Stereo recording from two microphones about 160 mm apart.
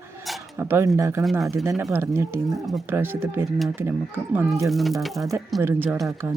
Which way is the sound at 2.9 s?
15° right (ahead or behind).